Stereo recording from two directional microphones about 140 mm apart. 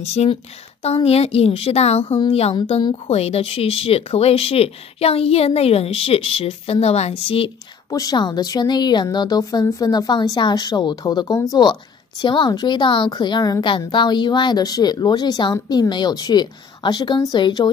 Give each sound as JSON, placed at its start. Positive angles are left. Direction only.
{"t": 0.0, "sound": "a woman's voice", "side_deg": 50}
{"t": 7.9, "sound": "a woman's voice", "side_deg": 25}